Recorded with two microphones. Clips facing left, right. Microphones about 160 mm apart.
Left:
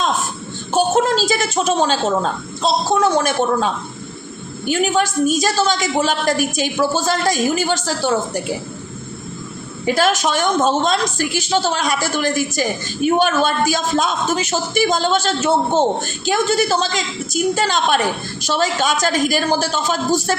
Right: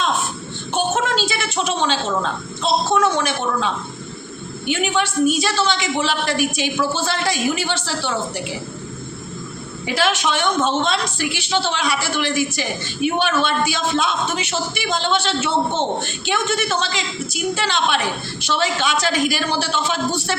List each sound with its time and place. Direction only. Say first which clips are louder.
0.7 s a woman's voice: left 5 dB; 35° left (ahead or behind)
9.8 s a woman's voice: left 4 dB; 45° left (ahead or behind)